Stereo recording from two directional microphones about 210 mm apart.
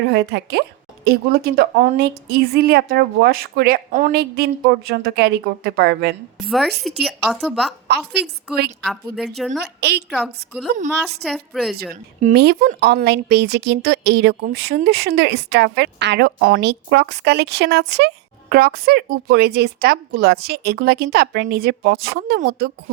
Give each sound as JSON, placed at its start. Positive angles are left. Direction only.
{"t": 0.1, "sound": "a woman's voice", "side_deg": -50}
{"t": 6.5, "sound": "speech", "side_deg": 0}
{"t": 7.9, "sound": "a woman's voice", "side_deg": -50}
{"t": 8.8, "sound": "speech", "side_deg": 0}
{"t": 12.3, "sound": "a woman's voice", "side_deg": -50}